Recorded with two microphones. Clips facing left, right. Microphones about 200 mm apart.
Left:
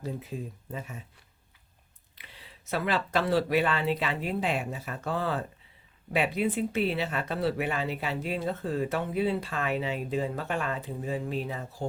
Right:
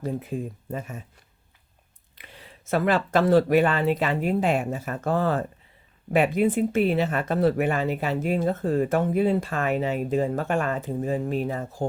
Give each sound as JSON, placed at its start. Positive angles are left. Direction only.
{"t": 0.0, "sound": "speech", "side_deg": -55}
{"t": 2.1, "sound": "speech", "side_deg": -50}